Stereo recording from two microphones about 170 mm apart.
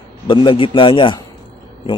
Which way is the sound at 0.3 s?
30° left (ahead or behind).